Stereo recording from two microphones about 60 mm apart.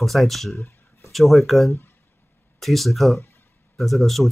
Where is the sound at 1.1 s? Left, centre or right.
Centre.